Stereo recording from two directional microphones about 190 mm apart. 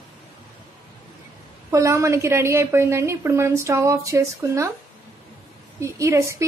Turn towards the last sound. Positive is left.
turn(degrees=-15)  # may be behind; listen again after turning